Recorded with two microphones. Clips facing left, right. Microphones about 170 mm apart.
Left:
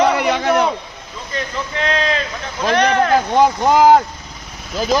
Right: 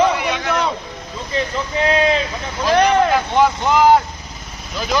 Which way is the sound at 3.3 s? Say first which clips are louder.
Left 3 dB; 40° left (ahead or behind).